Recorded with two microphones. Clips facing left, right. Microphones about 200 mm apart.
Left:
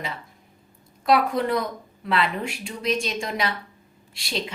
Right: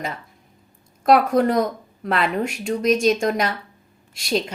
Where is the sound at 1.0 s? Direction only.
45° right (ahead or behind).